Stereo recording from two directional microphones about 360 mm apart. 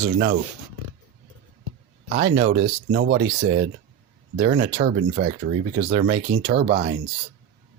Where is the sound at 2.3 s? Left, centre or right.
Centre.